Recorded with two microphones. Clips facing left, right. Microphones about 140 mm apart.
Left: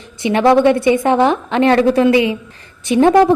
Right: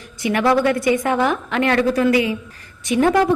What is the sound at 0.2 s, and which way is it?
A woman's voice, 25° left (ahead or behind).